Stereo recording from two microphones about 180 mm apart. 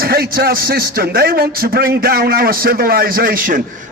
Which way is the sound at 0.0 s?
55° right (ahead or behind).